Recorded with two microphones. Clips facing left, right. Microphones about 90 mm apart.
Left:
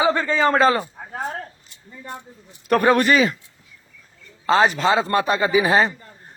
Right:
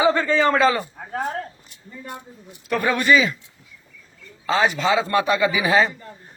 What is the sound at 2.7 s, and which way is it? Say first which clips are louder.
Speech: left 2 dB; 45° left (ahead or behind).